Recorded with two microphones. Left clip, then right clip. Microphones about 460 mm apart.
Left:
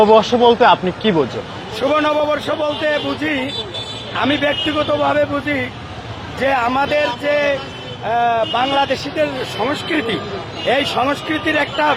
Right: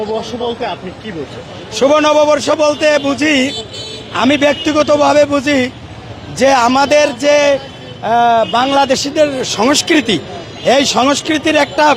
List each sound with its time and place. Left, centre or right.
0.2 s speech: left
1.9 s a man's voice: right